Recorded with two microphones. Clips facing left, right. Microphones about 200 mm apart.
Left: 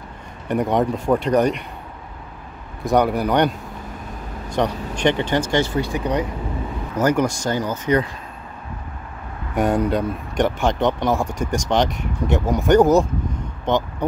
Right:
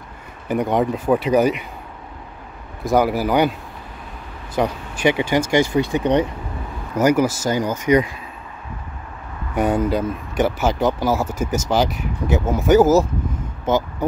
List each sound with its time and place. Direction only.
0.5 s speech: centre (ahead or behind)
2.8 s speech: centre (ahead or behind)
5.9 s speech: 25° right (ahead or behind)
7.0 s speech: 10° right (ahead or behind)
9.6 s speech: centre (ahead or behind)